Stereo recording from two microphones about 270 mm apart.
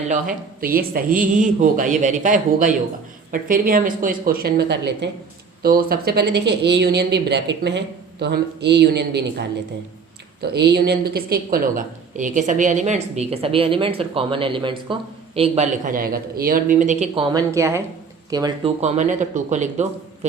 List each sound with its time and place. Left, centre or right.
0.1 s a woman's voice: right
10.5 s a woman's voice: right
17.3 s a woman's voice: centre; by 19.9 s right